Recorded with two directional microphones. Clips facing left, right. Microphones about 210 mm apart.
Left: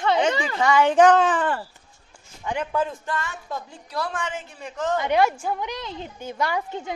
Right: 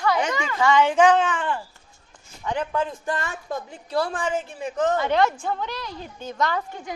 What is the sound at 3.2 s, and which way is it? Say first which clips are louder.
Speech: right 2 dB; 50° right (ahead or behind).